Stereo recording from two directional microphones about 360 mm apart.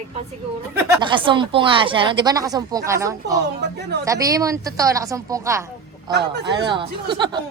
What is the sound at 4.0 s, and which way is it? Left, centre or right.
A woman's voice, centre.